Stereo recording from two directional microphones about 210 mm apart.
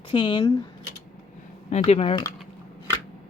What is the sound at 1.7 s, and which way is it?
Speech, 30° left (ahead or behind).